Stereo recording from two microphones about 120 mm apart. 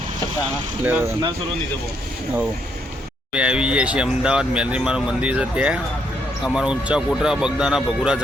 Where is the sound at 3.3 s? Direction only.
10° right (ahead or behind).